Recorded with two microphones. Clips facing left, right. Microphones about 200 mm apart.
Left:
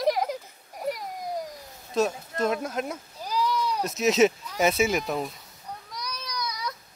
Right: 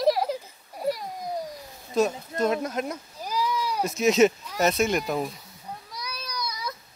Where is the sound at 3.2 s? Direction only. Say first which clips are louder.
Left 1 dB; 10° right (ahead or behind).